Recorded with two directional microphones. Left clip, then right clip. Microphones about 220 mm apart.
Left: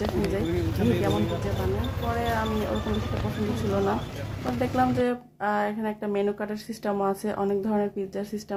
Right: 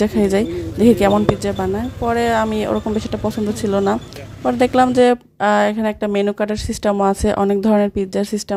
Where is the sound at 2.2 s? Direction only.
45° right (ahead or behind).